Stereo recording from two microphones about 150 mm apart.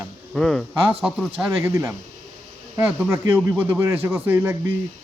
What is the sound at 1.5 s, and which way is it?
Speech, 20° right (ahead or behind).